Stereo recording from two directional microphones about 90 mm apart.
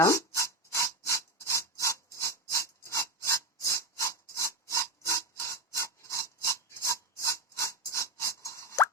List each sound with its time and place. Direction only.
0.0 s rub: 35° left (ahead or behind)